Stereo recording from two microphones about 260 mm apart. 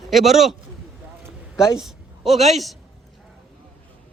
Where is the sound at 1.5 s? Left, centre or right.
Centre.